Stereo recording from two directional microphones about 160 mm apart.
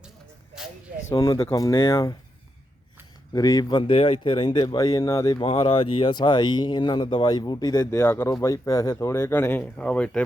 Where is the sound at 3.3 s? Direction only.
20° left (ahead or behind).